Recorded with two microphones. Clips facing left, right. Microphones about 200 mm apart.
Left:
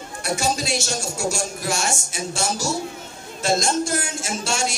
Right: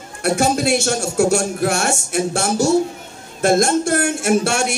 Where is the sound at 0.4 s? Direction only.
55° right (ahead or behind).